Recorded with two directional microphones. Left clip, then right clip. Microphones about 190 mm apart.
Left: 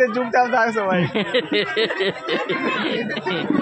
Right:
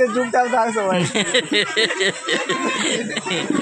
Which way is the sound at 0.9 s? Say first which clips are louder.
Right 2 dB; centre (ahead or behind).